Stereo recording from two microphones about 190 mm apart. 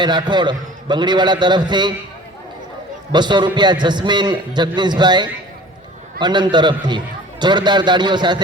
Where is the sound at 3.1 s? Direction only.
25° right (ahead or behind).